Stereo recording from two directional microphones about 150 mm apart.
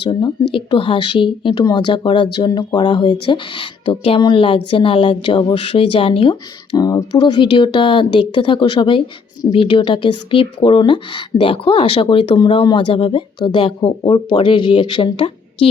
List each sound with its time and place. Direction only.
0.0 s speech: 30° left (ahead or behind)